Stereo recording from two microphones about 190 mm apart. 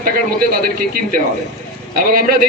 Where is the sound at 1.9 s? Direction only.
50° right (ahead or behind).